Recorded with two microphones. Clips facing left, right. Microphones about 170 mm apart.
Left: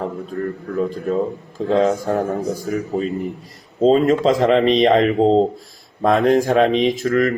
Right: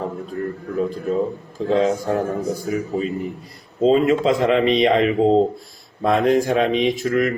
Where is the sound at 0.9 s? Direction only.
40° left (ahead or behind).